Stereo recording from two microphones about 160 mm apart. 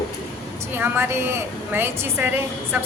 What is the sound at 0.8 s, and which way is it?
A woman's voice, 15° right (ahead or behind).